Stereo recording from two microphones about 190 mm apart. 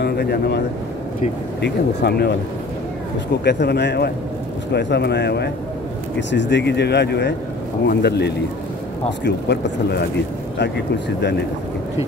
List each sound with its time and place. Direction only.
0.0 s speech: 60° left (ahead or behind)
1.6 s speech: 60° left (ahead or behind)
3.4 s speech: 65° left (ahead or behind)
10.6 s speech: 65° left (ahead or behind)